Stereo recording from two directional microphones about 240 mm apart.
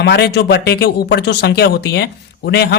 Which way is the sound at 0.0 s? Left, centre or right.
Left.